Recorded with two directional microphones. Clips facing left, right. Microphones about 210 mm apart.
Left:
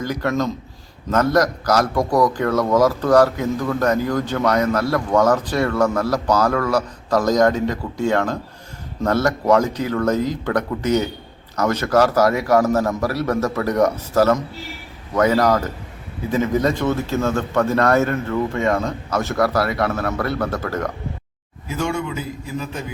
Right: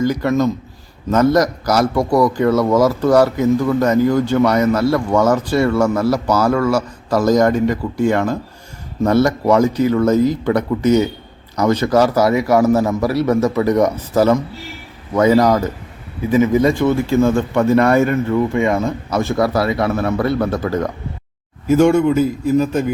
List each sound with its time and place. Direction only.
0.0 s a man's voice: 10° right (ahead or behind)
21.7 s a man's voice: 50° right (ahead or behind)